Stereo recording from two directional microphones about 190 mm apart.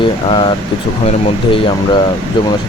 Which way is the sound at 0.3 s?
25° left (ahead or behind).